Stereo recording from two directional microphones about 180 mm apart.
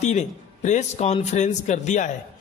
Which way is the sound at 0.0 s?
40° left (ahead or behind).